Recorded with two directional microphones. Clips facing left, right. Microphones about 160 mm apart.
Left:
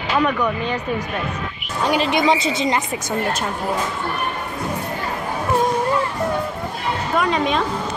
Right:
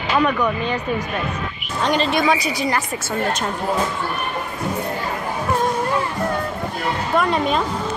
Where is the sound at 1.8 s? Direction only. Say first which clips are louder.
Left 1 dB; 10° left (ahead or behind).